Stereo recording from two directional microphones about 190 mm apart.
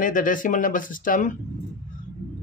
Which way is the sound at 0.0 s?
45° left (ahead or behind).